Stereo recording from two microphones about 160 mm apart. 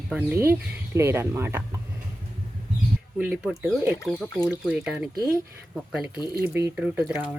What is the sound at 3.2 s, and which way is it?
Speech, 10° right (ahead or behind).